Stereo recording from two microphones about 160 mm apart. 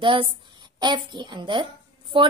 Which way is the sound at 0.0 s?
35° right (ahead or behind).